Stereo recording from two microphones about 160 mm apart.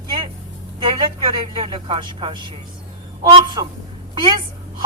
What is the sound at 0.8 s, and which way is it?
Speech, 30° right (ahead or behind).